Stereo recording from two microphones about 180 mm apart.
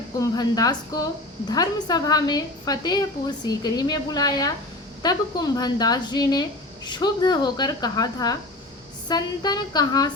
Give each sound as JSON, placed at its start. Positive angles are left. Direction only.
{"t": 0.2, "sound": "a woman's voice", "side_deg": 20}